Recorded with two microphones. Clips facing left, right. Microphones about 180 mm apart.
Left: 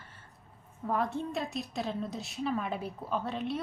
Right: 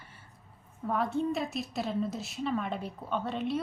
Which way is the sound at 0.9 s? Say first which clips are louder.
Right 2 dB; centre (ahead or behind).